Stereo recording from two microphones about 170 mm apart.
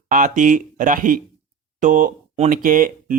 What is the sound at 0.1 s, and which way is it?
Speech, 50° right (ahead or behind).